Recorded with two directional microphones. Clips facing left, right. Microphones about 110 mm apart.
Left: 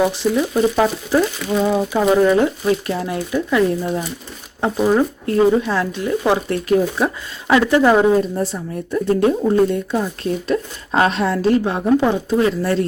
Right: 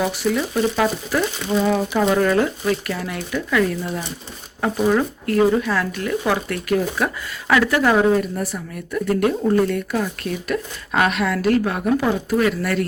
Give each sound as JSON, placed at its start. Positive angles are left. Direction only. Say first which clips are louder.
{"t": 0.1, "sound": "speech", "louder": "left 3 dB", "side_deg": 25}